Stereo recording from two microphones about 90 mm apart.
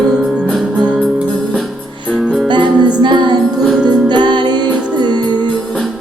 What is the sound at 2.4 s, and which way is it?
Music, 55° right (ahead or behind).